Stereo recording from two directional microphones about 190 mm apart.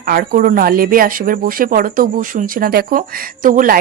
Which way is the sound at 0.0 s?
50° right (ahead or behind).